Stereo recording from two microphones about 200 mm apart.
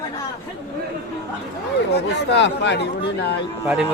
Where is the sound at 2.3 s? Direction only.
60° left (ahead or behind).